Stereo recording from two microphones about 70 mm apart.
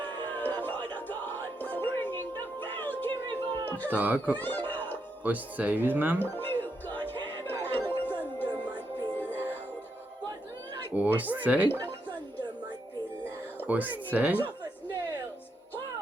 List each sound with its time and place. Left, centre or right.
0.0 s music: left
3.8 s speech: right
4.4 s a sound: left
5.2 s speech: right
6.1 s music: left
10.9 s speech: right
13.7 s speech: right